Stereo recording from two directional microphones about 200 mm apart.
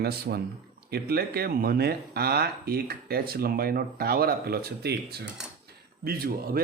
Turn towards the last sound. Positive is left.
turn(degrees=-50)  # may be behind; listen again after turning